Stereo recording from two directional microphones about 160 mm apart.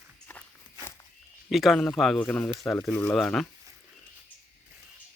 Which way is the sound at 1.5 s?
Centre (ahead or behind).